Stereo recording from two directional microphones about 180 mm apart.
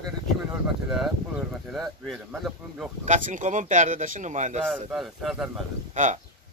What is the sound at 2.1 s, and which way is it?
Speech, centre (ahead or behind).